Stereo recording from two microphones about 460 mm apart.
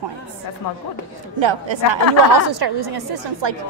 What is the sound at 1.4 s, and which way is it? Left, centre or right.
Speech, right.